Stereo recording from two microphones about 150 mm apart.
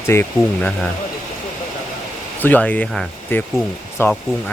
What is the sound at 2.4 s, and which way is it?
Speech, 10° left (ahead or behind).